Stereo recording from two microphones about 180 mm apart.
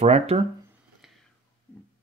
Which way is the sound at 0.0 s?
35° right (ahead or behind).